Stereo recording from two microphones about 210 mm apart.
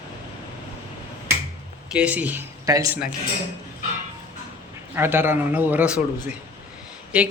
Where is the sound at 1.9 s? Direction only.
5° right (ahead or behind).